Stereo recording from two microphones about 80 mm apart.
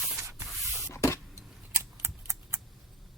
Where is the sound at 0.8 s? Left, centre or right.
Left.